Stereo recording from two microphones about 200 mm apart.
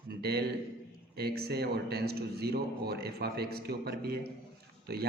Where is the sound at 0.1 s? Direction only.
50° right (ahead or behind).